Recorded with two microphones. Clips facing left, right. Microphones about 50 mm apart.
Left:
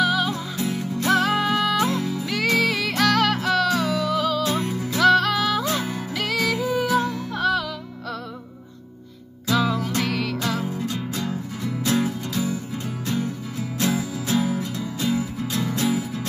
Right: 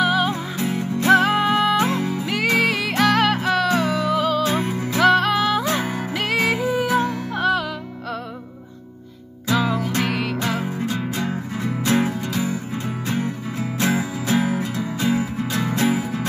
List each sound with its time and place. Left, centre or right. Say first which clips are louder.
0.0 s music: right 2 dB; right
5.7 s music: right 3 dB; right
9.6 s music: right 1 dB; centre
10.7 s music: right 3 dB; right